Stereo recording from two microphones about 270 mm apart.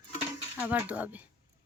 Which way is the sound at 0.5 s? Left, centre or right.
Centre.